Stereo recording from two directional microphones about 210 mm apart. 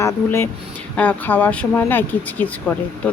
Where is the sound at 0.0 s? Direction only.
10° left (ahead or behind).